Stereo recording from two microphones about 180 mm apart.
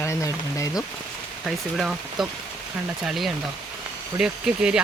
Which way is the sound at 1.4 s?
Centre (ahead or behind).